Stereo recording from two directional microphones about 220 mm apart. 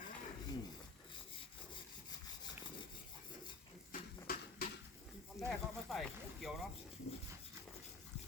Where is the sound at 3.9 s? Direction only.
40° left (ahead or behind).